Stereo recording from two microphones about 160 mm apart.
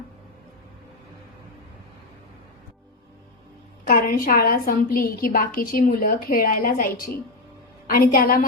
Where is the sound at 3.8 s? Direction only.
65° left (ahead or behind).